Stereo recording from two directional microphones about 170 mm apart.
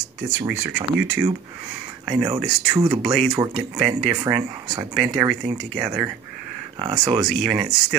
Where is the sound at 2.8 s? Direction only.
25° right (ahead or behind).